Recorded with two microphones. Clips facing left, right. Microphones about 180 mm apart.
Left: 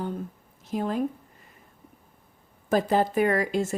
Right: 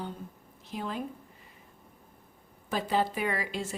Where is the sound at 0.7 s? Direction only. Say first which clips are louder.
Left 8 dB; 45° left (ahead or behind).